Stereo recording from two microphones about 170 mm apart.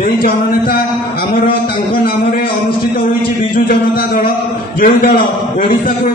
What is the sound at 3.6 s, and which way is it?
A man's voice, 60° left (ahead or behind).